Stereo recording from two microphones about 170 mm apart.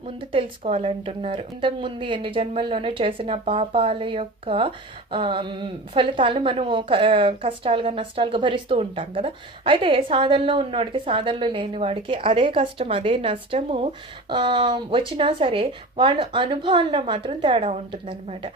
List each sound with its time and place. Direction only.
0.2 s a woman's voice: 30° right (ahead or behind)